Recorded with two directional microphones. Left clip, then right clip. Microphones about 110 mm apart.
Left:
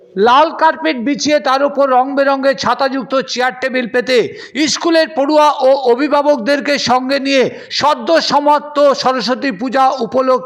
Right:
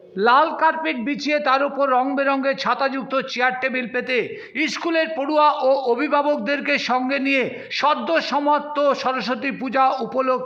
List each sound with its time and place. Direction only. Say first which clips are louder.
0.2 s a man's voice: left 7 dB; 80° left; by 10.4 s 55° left (ahead or behind)